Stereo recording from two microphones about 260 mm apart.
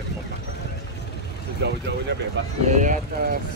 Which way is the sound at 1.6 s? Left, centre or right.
Right.